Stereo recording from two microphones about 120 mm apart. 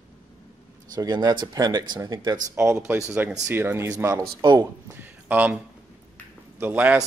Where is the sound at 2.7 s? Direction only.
25° right (ahead or behind).